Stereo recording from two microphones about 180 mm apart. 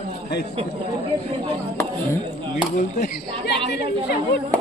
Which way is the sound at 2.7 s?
45° left (ahead or behind).